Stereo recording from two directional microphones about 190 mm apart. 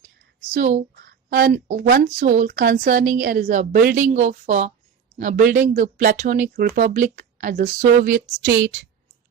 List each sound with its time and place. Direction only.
0.5 s a woman's voice: 45° right (ahead or behind)